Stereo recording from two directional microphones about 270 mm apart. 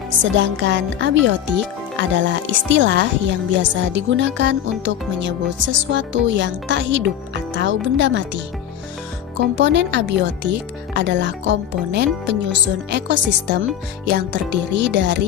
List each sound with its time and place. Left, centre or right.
0.1 s a woman's voice: right
9.6 s speech: right